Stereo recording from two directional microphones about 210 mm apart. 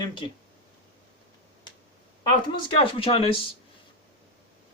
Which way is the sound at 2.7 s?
25° left (ahead or behind).